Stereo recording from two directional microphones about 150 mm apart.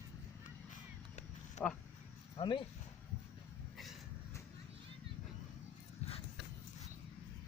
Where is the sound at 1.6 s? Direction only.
50° left (ahead or behind).